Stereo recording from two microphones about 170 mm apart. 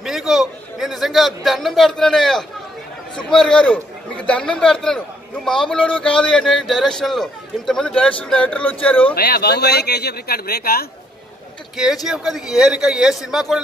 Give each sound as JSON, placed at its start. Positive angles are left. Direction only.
{"t": 0.0, "sound": "a sound", "side_deg": 0}
{"t": 3.3, "sound": "a man's voice", "side_deg": 5}
{"t": 9.1, "sound": "speech", "side_deg": 65}
{"t": 11.7, "sound": "a man's voice", "side_deg": 0}